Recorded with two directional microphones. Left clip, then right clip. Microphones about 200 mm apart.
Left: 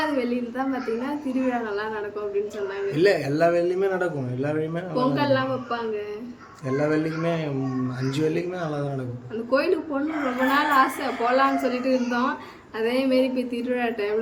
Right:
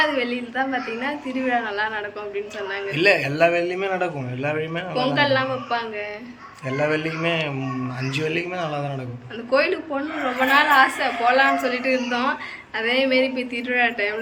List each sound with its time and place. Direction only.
0.2 s a woman's voice: 25° left (ahead or behind)
2.9 s a man's voice: centre (ahead or behind)
5.1 s a woman's voice: 25° left (ahead or behind)
6.7 s a man's voice: centre (ahead or behind)
9.5 s a woman's voice: 25° left (ahead or behind)